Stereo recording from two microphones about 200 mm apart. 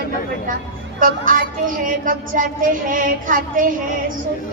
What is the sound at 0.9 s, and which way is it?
A woman's voice, 45° right (ahead or behind).